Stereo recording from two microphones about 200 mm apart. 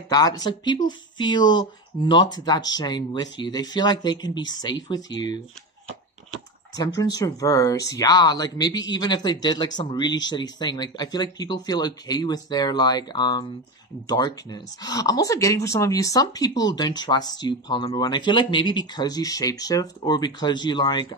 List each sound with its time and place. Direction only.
0.1 s speech: 20° left (ahead or behind)
6.7 s speech: 20° left (ahead or behind)